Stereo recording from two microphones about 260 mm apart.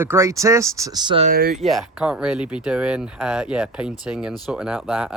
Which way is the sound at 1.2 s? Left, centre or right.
Right.